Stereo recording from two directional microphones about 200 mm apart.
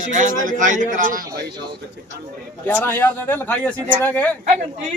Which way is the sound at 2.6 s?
10° left (ahead or behind).